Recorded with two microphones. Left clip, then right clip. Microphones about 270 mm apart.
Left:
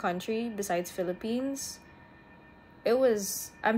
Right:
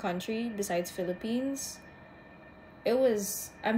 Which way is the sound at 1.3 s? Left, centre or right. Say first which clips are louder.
Left 1 dB; centre.